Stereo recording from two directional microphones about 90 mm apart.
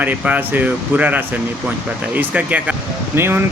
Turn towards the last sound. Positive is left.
turn(degrees=-25)  # may be behind; listen again after turning